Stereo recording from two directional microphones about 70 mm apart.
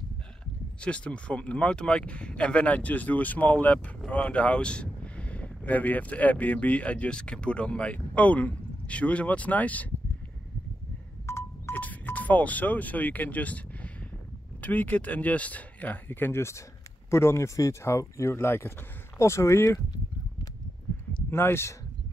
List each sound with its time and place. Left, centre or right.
0.7 s speech: centre
11.2 s wind chime: left
11.7 s speech: left
14.6 s speech: left
21.3 s speech: left